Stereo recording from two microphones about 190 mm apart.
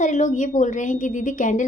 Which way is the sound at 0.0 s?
40° left (ahead or behind).